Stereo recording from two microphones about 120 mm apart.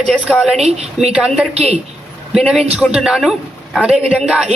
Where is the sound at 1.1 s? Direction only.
10° right (ahead or behind).